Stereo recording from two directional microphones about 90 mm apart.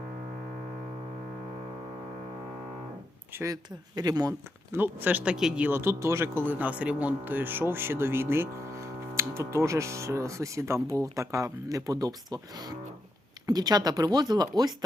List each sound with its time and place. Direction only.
3.4 s speech: 45° right (ahead or behind)
4.7 s speech: 20° right (ahead or behind)
5.6 s speech: 25° right (ahead or behind); by 14.5 s 45° right (ahead or behind)